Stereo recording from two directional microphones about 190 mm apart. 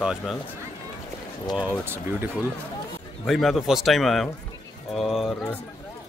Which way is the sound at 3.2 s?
Centre (ahead or behind).